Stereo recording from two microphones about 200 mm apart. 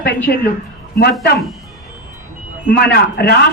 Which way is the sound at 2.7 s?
50° left (ahead or behind).